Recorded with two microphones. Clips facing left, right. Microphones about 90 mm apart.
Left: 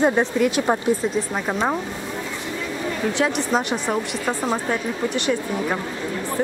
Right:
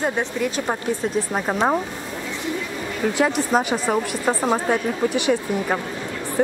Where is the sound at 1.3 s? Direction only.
10° right (ahead or behind).